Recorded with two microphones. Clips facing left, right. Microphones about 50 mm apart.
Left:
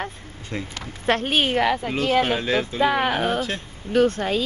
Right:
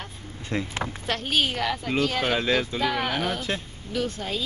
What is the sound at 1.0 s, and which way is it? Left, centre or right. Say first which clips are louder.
Speech: left 6 dB; left.